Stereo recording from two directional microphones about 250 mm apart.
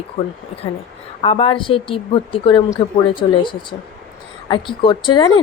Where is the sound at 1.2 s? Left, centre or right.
Left.